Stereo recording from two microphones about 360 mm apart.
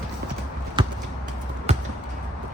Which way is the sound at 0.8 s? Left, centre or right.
Centre.